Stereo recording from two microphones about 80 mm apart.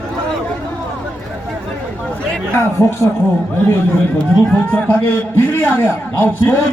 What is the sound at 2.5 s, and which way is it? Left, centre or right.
Speech, left.